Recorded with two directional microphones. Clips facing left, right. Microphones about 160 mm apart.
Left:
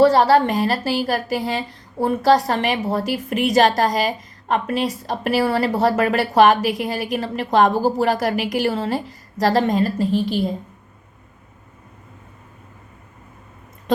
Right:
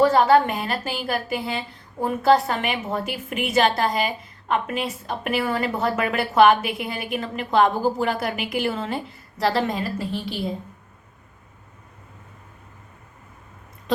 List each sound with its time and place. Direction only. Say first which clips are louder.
0.0 s a woman's voice: left 3 dB; 35° left (ahead or behind)